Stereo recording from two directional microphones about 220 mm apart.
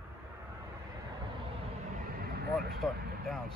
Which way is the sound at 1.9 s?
45° right (ahead or behind).